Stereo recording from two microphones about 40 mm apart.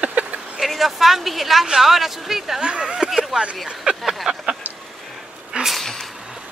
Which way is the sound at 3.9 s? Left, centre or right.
Right.